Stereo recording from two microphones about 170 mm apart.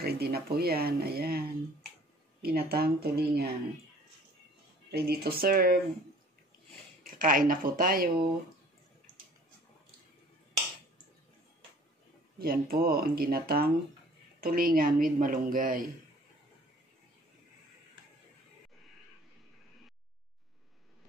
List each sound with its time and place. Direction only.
0.0 s speech: 65° right (ahead or behind)
2.4 s speech: 65° right (ahead or behind)
4.9 s speech: 70° right (ahead or behind)
7.0 s speech: 55° right (ahead or behind)
12.4 s speech: 60° right (ahead or behind)